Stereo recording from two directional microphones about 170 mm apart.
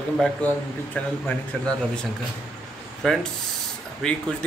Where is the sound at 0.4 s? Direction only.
10° left (ahead or behind).